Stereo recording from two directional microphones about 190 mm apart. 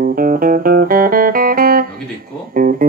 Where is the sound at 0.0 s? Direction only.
50° right (ahead or behind).